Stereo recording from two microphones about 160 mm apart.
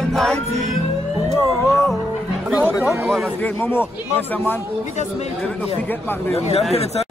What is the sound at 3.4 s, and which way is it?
Speech, 15° left (ahead or behind).